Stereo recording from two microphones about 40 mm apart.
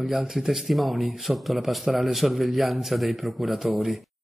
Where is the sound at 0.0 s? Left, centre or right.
Centre.